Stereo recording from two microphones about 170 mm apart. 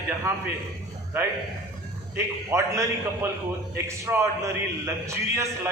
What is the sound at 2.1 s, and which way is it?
A man's voice, 15° right (ahead or behind).